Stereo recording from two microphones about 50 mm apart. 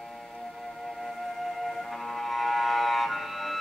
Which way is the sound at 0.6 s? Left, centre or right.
Centre.